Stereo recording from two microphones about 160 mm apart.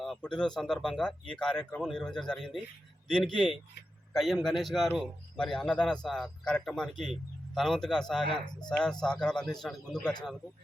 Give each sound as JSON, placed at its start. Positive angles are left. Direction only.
{"t": 0.0, "sound": "a man's voice", "side_deg": 5}
{"t": 8.2, "sound": "speech", "side_deg": 30}
{"t": 8.7, "sound": "speech", "side_deg": 5}